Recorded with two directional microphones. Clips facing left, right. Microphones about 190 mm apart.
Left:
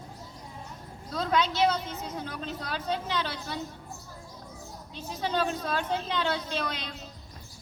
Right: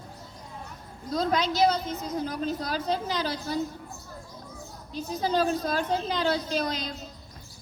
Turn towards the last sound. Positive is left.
turn(degrees=-40)  # may be behind; listen again after turning